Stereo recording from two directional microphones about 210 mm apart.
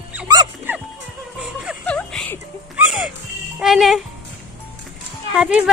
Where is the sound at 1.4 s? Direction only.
Centre (ahead or behind).